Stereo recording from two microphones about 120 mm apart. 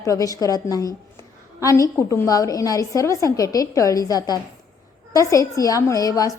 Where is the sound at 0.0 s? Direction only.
30° left (ahead or behind).